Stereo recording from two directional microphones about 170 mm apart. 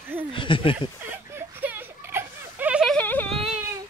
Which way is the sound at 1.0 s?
10° right (ahead or behind).